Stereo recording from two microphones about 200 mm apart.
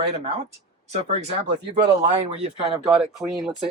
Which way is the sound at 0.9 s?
30° right (ahead or behind).